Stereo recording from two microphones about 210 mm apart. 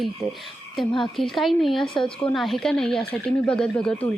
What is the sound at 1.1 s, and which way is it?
Speech, centre (ahead or behind).